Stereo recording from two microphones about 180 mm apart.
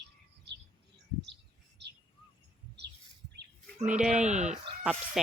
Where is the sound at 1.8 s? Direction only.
70° right (ahead or behind).